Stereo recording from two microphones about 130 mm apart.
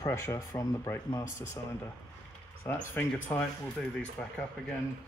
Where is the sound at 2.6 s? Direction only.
15° left (ahead or behind).